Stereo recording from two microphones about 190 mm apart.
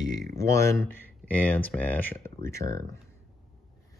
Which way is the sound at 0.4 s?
15° left (ahead or behind).